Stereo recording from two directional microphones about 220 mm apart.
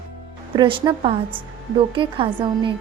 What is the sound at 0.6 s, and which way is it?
A woman's voice, 20° right (ahead or behind).